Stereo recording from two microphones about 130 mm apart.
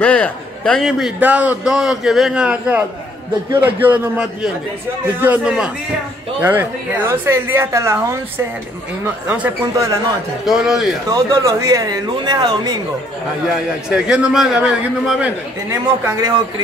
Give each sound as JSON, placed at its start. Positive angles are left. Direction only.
{"t": 0.0, "sound": "a man's voice", "side_deg": 10}
{"t": 0.8, "sound": "a man's voice", "side_deg": 0}
{"t": 9.0, "sound": "a woman's voice", "side_deg": -10}
{"t": 11.1, "sound": "a man's voice", "side_deg": -30}
{"t": 13.8, "sound": "a man's voice", "side_deg": -5}
{"t": 15.7, "sound": "a man's voice", "side_deg": -30}